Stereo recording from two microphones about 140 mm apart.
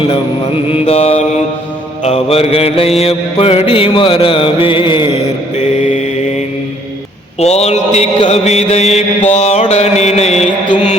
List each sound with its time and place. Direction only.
0.7 s mantra: 45° left (ahead or behind)
5.5 s mantra: 55° left (ahead or behind)
7.3 s mantra: 50° left (ahead or behind)